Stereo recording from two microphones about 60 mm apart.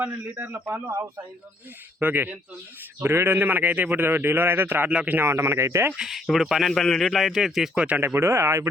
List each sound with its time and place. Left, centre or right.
0.0 s a man's voice: right
2.0 s speech: right
3.0 s a man's voice: right
4.9 s speech: centre
5.3 s speech: right
6.0 s speech: centre
6.7 s speech: centre
7.8 s speech: right
8.0 s speech: right